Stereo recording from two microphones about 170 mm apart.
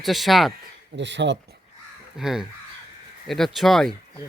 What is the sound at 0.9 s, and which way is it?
Speech, 90° right.